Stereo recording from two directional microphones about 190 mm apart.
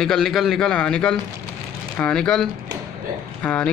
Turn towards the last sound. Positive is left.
turn(degrees=5)  # may be behind; listen again after turning